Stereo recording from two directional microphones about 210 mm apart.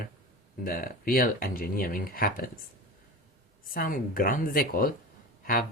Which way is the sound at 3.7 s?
45° left (ahead or behind).